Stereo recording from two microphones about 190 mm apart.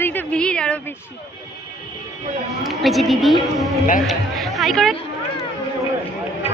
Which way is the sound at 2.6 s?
Centre (ahead or behind).